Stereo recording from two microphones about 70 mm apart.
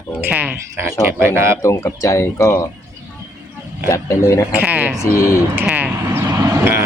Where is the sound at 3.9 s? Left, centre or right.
Left.